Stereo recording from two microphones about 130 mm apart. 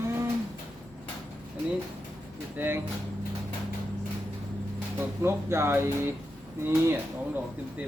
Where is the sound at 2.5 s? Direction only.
15° right (ahead or behind).